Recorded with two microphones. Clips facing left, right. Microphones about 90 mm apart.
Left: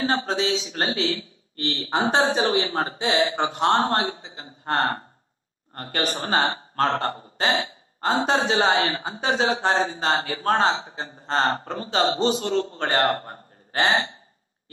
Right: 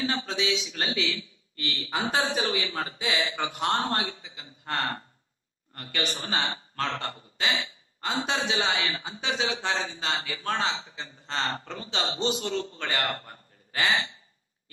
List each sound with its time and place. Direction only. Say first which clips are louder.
0.0 s a man's voice: left 6 dB; 40° left (ahead or behind)